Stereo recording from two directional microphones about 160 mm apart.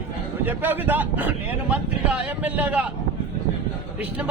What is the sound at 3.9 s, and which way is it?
Speech, 10° right (ahead or behind).